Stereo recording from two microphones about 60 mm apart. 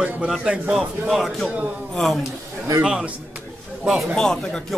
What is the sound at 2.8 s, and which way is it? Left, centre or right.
Speech, centre.